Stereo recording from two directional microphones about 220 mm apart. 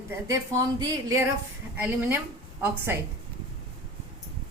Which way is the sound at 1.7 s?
10° right (ahead or behind).